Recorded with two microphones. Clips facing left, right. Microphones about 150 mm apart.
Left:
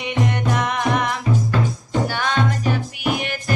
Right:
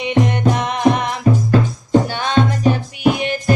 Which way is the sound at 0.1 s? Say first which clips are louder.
Right 5 dB; 25° right (ahead or behind).